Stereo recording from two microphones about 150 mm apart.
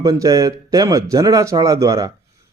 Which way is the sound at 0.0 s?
25° right (ahead or behind).